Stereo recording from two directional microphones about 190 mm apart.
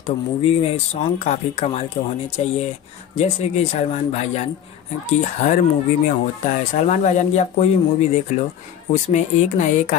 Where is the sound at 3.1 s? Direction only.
35° left (ahead or behind).